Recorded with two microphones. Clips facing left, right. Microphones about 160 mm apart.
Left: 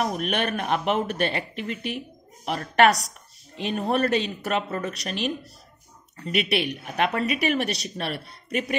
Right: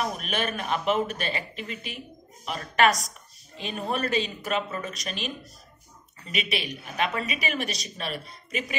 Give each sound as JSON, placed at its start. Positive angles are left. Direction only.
{"t": 0.2, "sound": "a woman's voice", "side_deg": 65}